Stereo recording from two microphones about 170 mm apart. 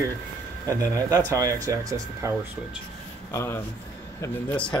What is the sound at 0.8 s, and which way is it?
Speech, 20° right (ahead or behind).